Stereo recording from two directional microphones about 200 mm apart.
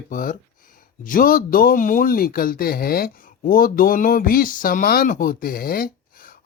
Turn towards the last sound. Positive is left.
turn(degrees=45)  # may be behind; listen again after turning